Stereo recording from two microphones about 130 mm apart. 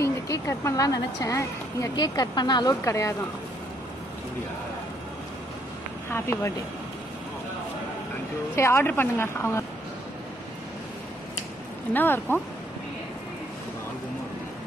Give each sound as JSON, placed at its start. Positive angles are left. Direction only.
{"t": 0.0, "sound": "a woman's voice", "side_deg": 25}
{"t": 6.0, "sound": "speech", "side_deg": 20}
{"t": 8.5, "sound": "a woman's voice", "side_deg": 20}
{"t": 11.9, "sound": "speech", "side_deg": 15}